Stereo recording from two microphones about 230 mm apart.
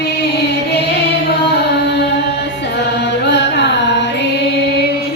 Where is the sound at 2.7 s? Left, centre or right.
Left.